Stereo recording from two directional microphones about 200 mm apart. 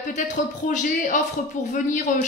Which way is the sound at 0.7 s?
40° left (ahead or behind).